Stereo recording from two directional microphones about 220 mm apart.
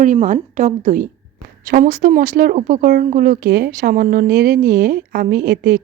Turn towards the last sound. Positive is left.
turn(degrees=-40)  # may be behind; listen again after turning